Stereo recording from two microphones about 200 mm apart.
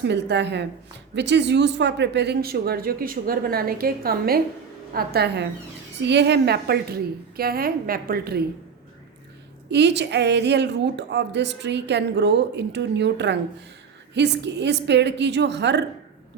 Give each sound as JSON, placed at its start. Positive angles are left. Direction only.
{"t": 0.0, "sound": "a woman's voice", "side_deg": -60}
{"t": 9.6, "sound": "a woman's voice", "side_deg": -60}